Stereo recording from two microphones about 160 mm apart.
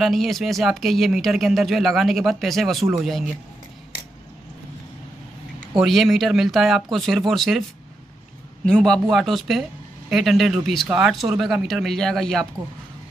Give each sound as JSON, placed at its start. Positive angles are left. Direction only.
{"t": 0.0, "sound": "speech", "side_deg": 0}
{"t": 5.8, "sound": "speech", "side_deg": 0}
{"t": 8.6, "sound": "speech", "side_deg": 5}